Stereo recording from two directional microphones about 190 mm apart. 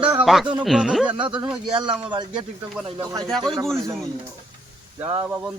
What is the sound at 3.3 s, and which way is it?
Speech, centre (ahead or behind).